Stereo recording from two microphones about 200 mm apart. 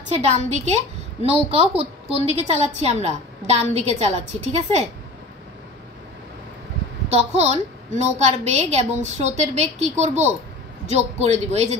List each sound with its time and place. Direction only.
0.1 s a woman's voice: 35° right (ahead or behind)
7.1 s a woman's voice: 30° right (ahead or behind)